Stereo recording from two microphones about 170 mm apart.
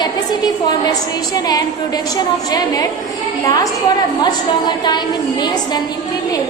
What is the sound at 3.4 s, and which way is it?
A woman's voice, 20° left (ahead or behind).